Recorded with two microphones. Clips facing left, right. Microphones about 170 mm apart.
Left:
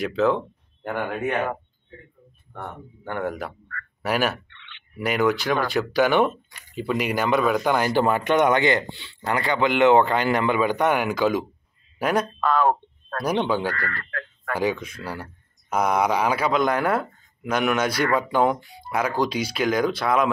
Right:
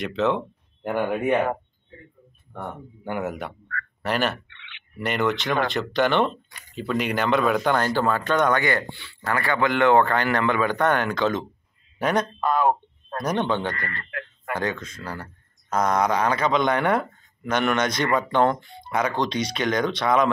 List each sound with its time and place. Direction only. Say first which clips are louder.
0.0 s speech: left 2 dB; centre (ahead or behind)
0.8 s speech: right 3 dB; 15° right (ahead or behind)
3.0 s speech: left 1 dB; 10° right (ahead or behind)
12.4 s a sound: left 1 dB; 15° right (ahead or behind)
13.2 s speech: left 1 dB; 10° left (ahead or behind)
13.7 s speech: left 2 dB; 20° right (ahead or behind)
14.5 s speech: left 3 dB; 10° left (ahead or behind)